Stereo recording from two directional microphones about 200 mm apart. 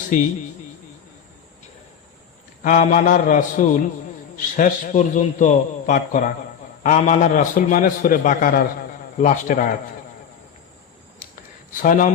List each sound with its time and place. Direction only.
2.6 s a man's voice: 40° left (ahead or behind)
11.7 s a man's voice: 40° left (ahead or behind)